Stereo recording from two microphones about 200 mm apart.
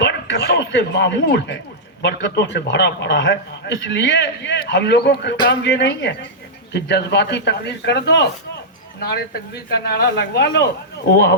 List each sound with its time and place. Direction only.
0.0 s a man's voice: 60° left (ahead or behind)